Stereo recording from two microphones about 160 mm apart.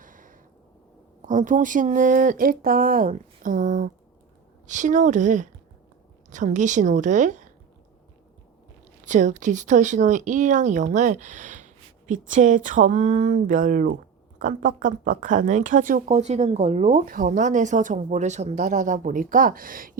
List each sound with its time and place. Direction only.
0.0 s a sound: 55° right (ahead or behind)
1.3 s speech: 50° right (ahead or behind)
9.0 s speech: 50° right (ahead or behind)
17.1 s speech: 55° right (ahead or behind)